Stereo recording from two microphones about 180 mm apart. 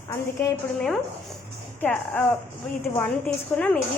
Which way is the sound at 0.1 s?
15° left (ahead or behind).